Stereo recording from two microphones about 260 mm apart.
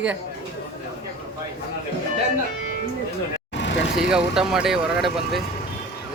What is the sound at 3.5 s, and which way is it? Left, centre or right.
Vehicle, left.